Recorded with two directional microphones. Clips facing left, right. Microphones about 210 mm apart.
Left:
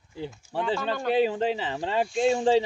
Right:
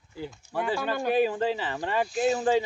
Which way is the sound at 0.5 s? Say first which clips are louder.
Left 1 dB; 10° right (ahead or behind).